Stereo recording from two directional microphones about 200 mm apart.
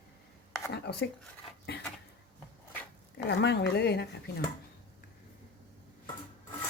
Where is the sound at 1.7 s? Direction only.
55° left (ahead or behind).